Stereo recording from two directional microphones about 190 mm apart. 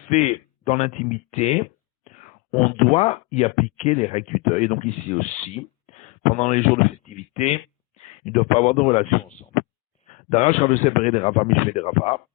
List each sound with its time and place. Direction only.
0.1 s a man's voice: 35° left (ahead or behind)